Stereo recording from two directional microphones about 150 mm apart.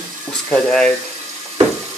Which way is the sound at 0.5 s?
5° left (ahead or behind).